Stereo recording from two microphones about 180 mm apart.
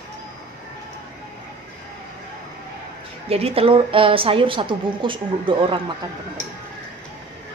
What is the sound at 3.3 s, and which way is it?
A woman's voice, 35° right (ahead or behind).